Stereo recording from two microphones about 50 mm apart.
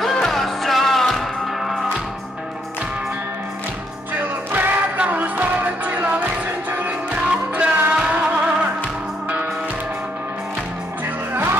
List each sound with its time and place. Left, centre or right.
0.0 s music: centre
4.1 s music: right
4.9 s music: right